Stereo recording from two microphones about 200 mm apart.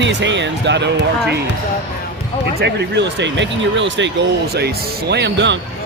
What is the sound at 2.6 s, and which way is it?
Speech, 60° right (ahead or behind).